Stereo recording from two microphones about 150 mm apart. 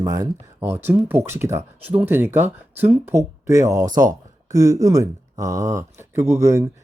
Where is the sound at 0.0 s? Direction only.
20° right (ahead or behind).